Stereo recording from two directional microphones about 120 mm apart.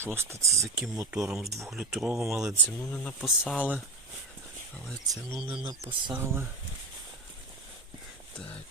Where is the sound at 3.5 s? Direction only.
10° right (ahead or behind).